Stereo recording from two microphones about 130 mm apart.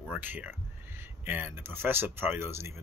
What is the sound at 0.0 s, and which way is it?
Speech, 10° right (ahead or behind).